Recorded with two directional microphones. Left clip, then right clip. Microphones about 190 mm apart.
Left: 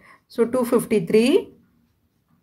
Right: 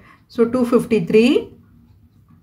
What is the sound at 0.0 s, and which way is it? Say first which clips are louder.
Speech: right 4 dB; 30° left (ahead or behind).